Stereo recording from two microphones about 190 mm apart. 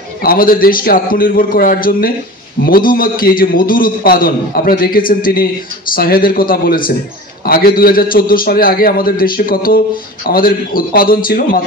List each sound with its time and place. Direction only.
0.2 s a man's voice: 50° left (ahead or behind)